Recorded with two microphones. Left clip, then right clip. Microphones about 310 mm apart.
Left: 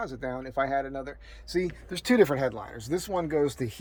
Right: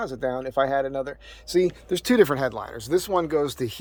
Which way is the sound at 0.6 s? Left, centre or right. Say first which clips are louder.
Right 5 dB; right.